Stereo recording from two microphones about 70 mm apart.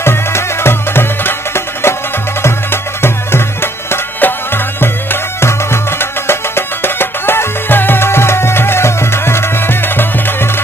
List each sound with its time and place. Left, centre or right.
0.0 s music: left
3.0 s music: left